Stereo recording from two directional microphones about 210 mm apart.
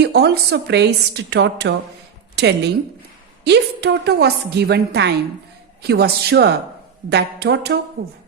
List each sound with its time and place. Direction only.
0.0 s a woman's voice: 50° right (ahead or behind)